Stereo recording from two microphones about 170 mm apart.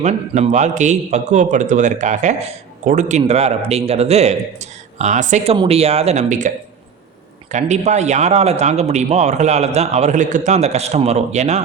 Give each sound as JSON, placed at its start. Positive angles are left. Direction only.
{"t": 0.0, "sound": "a man's voice", "side_deg": -40}
{"t": 7.5, "sound": "a man's voice", "side_deg": -40}